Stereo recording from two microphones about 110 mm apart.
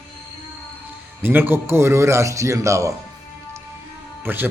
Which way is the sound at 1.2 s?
20° right (ahead or behind).